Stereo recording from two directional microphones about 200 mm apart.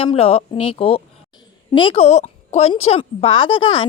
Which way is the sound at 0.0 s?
30° left (ahead or behind).